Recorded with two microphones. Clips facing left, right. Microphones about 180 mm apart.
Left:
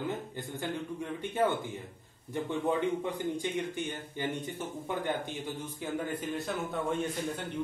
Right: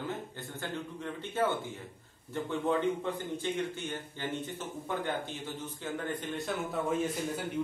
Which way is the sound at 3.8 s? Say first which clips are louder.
Left 3 dB; 15° left (ahead or behind).